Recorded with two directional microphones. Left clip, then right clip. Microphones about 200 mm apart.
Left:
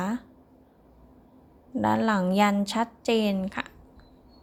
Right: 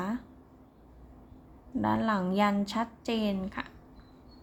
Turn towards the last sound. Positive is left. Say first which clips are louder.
# left 5 dB
turn(degrees=30)  # may be behind; listen again after turning